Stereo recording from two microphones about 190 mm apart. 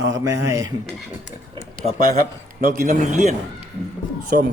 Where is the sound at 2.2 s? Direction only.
45° right (ahead or behind).